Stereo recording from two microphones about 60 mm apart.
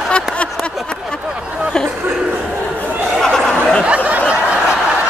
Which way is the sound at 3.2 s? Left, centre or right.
Centre.